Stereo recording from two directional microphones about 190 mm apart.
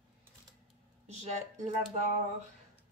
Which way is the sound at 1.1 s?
35° right (ahead or behind).